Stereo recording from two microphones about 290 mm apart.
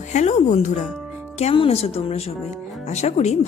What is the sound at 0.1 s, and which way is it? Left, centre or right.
Speech, left.